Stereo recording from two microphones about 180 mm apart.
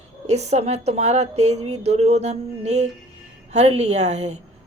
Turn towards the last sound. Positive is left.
turn(degrees=-40)  # may be behind; listen again after turning